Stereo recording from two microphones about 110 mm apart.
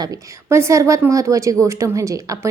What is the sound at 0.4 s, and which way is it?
A woman's voice, 25° right (ahead or behind).